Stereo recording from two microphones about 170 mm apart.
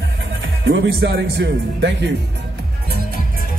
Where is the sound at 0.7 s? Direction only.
90° right.